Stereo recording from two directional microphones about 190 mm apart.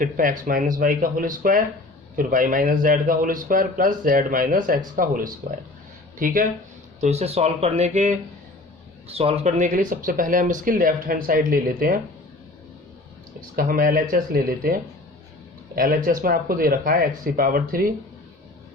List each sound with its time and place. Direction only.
0.0 s speech: 45° right (ahead or behind)
7.0 s speech: 35° right (ahead or behind)
13.6 s speech: 50° right (ahead or behind)